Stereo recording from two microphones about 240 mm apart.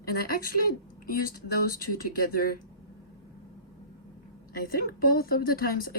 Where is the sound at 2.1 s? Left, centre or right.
Left.